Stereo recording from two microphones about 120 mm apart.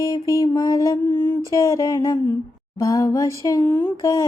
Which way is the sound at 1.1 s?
20° left (ahead or behind).